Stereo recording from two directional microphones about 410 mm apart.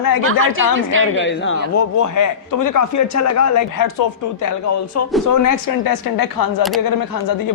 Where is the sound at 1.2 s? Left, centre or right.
Left.